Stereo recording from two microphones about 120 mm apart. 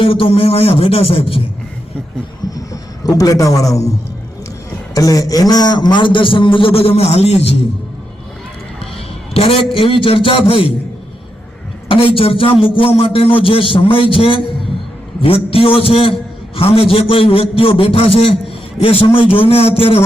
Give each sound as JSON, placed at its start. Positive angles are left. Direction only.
{"t": 0.0, "sound": "a man's voice", "side_deg": 50}
{"t": 2.4, "sound": "a sound", "side_deg": 35}
{"t": 3.1, "sound": "a man's voice", "side_deg": 30}
{"t": 4.9, "sound": "a man's voice", "side_deg": 30}
{"t": 9.3, "sound": "a man's voice", "side_deg": 55}
{"t": 11.9, "sound": "a man's voice", "side_deg": 50}